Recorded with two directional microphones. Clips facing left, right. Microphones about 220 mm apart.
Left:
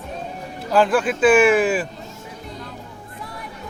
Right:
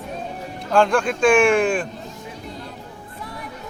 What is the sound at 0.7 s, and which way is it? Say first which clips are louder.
Speech: even; 5° left (ahead or behind).